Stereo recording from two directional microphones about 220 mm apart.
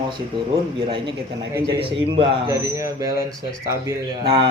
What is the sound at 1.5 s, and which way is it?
Speech, 15° right (ahead or behind).